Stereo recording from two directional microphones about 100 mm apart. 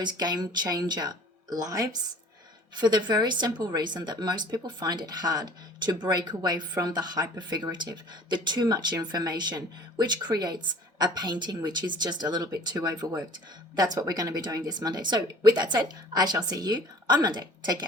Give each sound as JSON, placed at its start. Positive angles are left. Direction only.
{"t": 0.0, "sound": "speech", "side_deg": -45}